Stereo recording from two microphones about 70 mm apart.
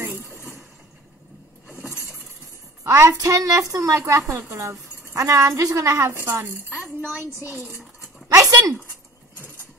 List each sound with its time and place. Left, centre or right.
0.0 s vehicle: right
1.9 s a sound: centre
2.8 s a woman's voice: right
7.0 s a woman's voice: centre
7.6 s dishes: centre
8.3 s a sound: right